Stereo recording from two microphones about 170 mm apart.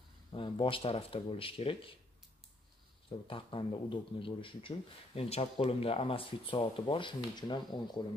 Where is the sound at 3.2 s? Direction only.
30° left (ahead or behind).